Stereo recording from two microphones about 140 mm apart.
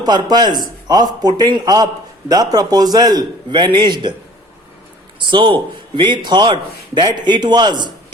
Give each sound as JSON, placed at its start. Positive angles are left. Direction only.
{"t": 0.0, "sound": "a man's voice", "side_deg": -30}
{"t": 5.2, "sound": "a man's voice", "side_deg": -35}